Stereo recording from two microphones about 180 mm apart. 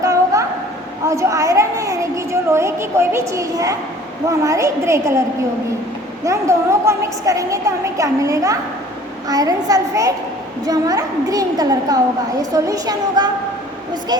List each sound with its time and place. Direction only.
0.0 s a sound: 15° right (ahead or behind)
1.0 s a woman's voice: 15° right (ahead or behind)
6.2 s a woman's voice: 15° right (ahead or behind)